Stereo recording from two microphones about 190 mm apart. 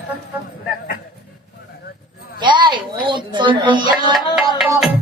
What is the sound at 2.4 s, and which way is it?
A woman's voice, 25° right (ahead or behind).